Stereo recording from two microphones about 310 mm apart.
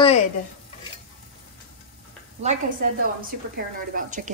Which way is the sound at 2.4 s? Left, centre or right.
Right.